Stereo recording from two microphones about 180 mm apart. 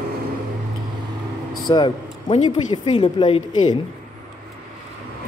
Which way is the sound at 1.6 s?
25° left (ahead or behind).